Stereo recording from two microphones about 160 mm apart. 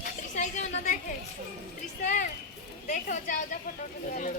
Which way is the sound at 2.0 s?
55° left (ahead or behind).